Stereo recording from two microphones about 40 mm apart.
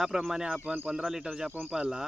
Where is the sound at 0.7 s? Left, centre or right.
Right.